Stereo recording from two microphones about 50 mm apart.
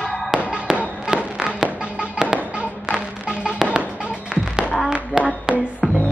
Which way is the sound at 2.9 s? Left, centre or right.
Centre.